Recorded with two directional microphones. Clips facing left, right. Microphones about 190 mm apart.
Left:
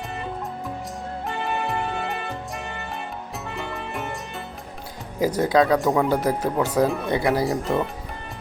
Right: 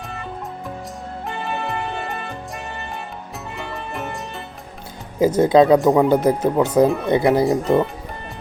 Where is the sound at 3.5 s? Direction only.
Centre (ahead or behind).